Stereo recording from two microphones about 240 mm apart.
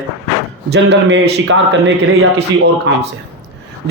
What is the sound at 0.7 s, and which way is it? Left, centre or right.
Speech, right.